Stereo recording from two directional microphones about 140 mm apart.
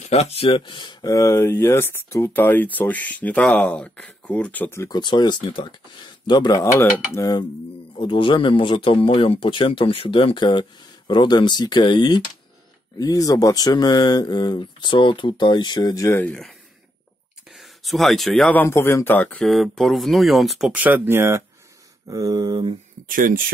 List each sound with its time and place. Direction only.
0.0 s speech: 50° left (ahead or behind); by 4.8 s 15° left (ahead or behind)
4.8 s speech: 30° left (ahead or behind)
8.0 s speech: 35° left (ahead or behind)
16.2 s speech: 5° left (ahead or behind); by 22.8 s 35° right (ahead or behind)
23.0 s speech: 85° right